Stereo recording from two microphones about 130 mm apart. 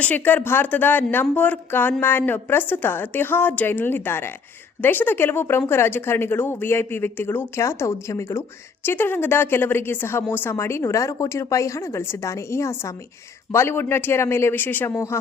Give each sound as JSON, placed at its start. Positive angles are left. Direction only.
{"t": 0.0, "sound": "a woman's voice", "side_deg": 10}